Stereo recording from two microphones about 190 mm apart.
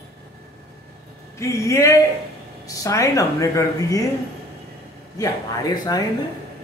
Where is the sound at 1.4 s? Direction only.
15° left (ahead or behind).